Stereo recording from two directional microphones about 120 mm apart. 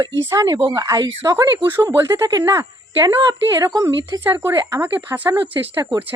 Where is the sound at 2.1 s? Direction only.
25° right (ahead or behind).